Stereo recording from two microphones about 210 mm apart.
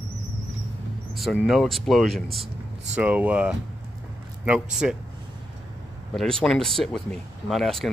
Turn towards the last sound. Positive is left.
turn(degrees=0)  # may be behind; listen again after turning